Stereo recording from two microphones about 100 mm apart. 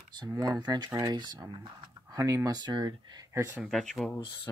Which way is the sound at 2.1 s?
30° right (ahead or behind).